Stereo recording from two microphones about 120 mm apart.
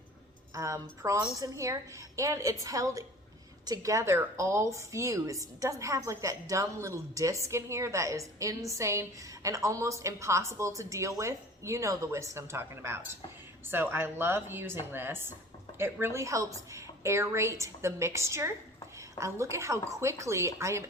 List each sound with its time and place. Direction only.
0.5 s speech: 25° right (ahead or behind)